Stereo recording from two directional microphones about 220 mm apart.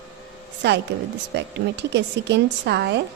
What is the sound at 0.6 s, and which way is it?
A woman's voice, 50° right (ahead or behind).